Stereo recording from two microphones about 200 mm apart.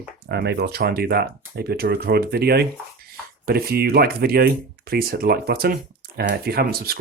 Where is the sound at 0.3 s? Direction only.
55° right (ahead or behind).